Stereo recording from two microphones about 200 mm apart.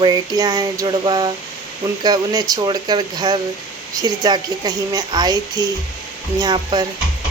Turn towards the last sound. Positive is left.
turn(degrees=-20)  # may be behind; listen again after turning